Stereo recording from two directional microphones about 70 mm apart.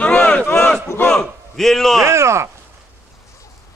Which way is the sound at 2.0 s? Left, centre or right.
Right.